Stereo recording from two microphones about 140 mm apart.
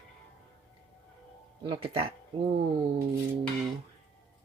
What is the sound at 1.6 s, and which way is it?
Speech, 40° right (ahead or behind).